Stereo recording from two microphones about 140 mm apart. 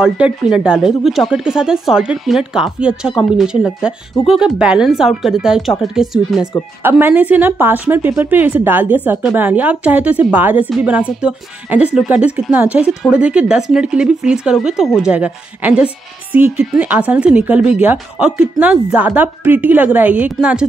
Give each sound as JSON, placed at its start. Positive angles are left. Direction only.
{"t": 0.0, "sound": "speech", "side_deg": -5}
{"t": 6.8, "sound": "speech", "side_deg": -15}